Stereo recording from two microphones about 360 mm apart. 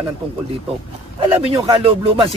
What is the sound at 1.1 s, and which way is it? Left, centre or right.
Speech, centre.